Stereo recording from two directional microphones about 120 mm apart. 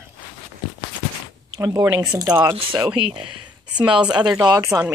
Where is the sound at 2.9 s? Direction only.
50° right (ahead or behind).